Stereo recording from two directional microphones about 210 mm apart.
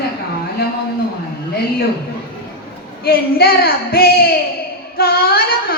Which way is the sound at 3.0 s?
45° left (ahead or behind).